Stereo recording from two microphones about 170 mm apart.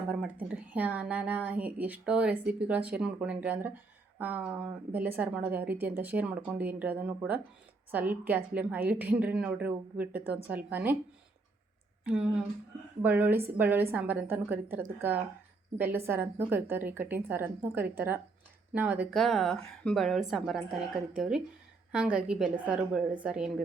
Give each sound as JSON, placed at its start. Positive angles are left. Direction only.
{"t": 0.1, "sound": "a woman's voice", "side_deg": -5}
{"t": 12.0, "sound": "a woman's voice", "side_deg": -5}
{"t": 19.1, "sound": "a woman's voice", "side_deg": 0}